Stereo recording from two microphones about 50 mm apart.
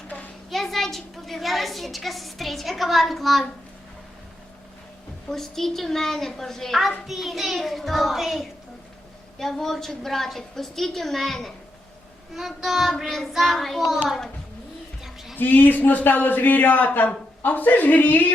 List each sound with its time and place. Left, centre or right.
0.5 s a woman's voice: centre
5.3 s a child's voice: centre
9.4 s a woman's voice: centre
15.0 s music: centre
15.4 s a man's voice: left